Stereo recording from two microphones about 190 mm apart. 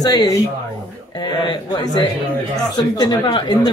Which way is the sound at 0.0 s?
20° left (ahead or behind).